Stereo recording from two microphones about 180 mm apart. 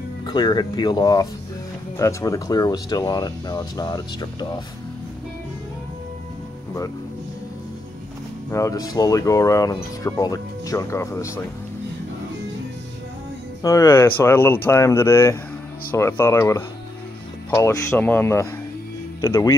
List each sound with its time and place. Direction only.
0.2 s speech: 25° left (ahead or behind)
8.5 s speech: 15° left (ahead or behind)
13.6 s speech: 15° left (ahead or behind)